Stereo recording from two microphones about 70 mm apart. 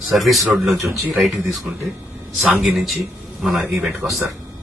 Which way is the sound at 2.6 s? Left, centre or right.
Centre.